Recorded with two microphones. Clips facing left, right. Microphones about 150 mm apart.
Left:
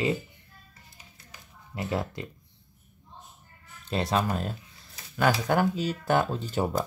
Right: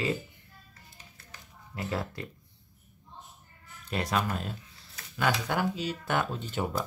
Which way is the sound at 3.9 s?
30° left (ahead or behind).